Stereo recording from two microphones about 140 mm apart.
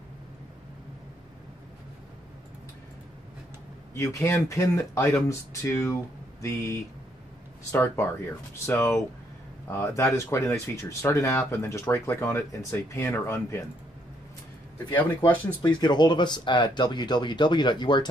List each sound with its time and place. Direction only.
3.9 s speech: 20° left (ahead or behind)
7.7 s speech: 15° left (ahead or behind)
14.9 s speech: 15° left (ahead or behind)
15.6 s speech: 30° left (ahead or behind)